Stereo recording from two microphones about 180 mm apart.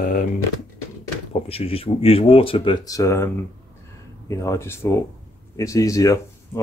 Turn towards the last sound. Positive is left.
turn(degrees=20)  # may be behind; listen again after turning